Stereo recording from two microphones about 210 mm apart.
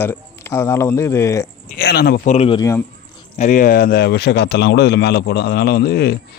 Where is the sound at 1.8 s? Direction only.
45° left (ahead or behind).